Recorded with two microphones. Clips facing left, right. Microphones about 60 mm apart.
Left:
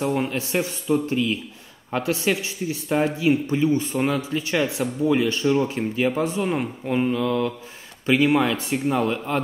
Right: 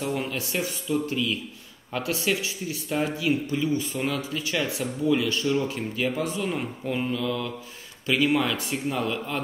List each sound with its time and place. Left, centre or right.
0.3 s speech: left
7.2 s speech: left